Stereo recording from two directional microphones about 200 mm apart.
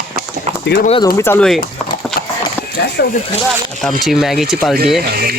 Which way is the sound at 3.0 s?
60° left (ahead or behind).